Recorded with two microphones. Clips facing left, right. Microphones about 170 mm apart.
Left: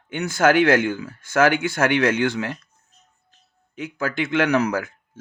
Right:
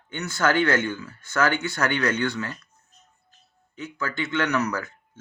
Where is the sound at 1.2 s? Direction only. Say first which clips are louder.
Left 5 dB; 90° left.